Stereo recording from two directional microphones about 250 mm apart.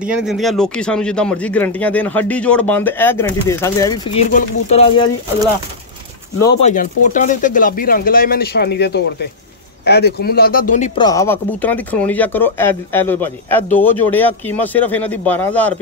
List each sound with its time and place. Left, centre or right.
0.0 s a man's voice: centre
4.3 s speech: left
6.6 s speech: left
11.0 s speech: centre